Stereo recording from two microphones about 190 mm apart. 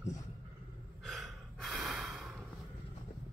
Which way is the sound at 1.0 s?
Centre (ahead or behind).